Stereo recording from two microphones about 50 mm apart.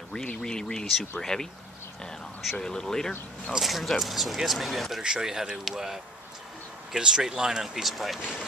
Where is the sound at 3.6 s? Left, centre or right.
Centre.